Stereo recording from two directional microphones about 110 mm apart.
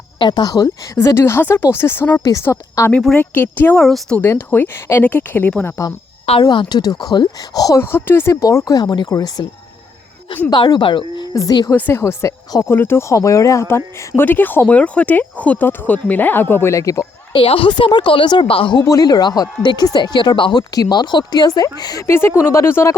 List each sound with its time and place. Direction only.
0.2 s speech: 45° left (ahead or behind); by 3.8 s 20° left (ahead or behind)
3.8 s speech: 5° left (ahead or behind)
4.2 s speech: 20° left (ahead or behind)
6.4 s speech: 40° left (ahead or behind)
7.8 s speech: 20° left (ahead or behind); by 9.5 s 35° left (ahead or behind)
10.5 s speech: 45° left (ahead or behind)
11.3 s speech: 35° left (ahead or behind)
11.7 s speech: 20° left (ahead or behind)
17.3 s speech: 55° left (ahead or behind)
18.8 s speech: 30° left (ahead or behind)
22.0 s speech: 25° left (ahead or behind)